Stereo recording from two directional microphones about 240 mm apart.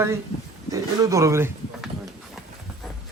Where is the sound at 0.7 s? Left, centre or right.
Centre.